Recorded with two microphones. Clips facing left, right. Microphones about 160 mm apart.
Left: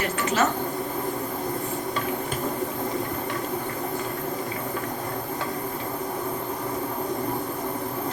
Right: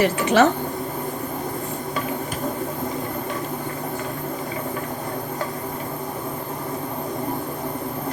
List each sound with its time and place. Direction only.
0.0 s speech: 70° right (ahead or behind)